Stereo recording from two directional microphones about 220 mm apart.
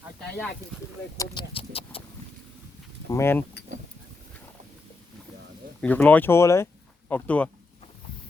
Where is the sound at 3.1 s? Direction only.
10° left (ahead or behind).